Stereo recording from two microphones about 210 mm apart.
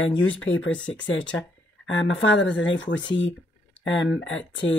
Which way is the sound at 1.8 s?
65° left (ahead or behind).